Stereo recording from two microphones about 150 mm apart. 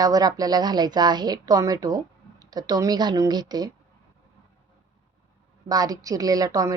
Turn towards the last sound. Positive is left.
turn(degrees=-25)  # may be behind; listen again after turning